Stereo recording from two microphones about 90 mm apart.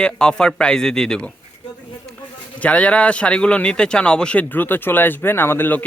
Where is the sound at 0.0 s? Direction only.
10° left (ahead or behind).